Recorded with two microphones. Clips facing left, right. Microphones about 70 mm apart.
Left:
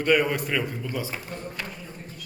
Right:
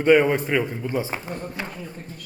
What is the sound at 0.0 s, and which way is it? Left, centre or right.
A man's voice, right.